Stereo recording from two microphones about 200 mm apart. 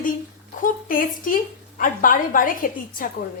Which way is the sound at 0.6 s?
45° left (ahead or behind).